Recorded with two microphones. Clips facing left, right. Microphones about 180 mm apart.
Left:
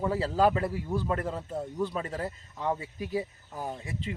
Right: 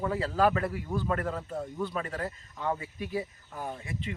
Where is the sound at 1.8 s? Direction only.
30° left (ahead or behind).